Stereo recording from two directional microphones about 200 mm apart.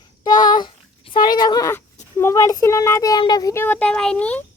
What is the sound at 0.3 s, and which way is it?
Speech, 20° left (ahead or behind).